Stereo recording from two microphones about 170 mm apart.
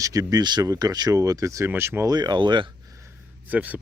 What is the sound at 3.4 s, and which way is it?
Speech, 10° right (ahead or behind).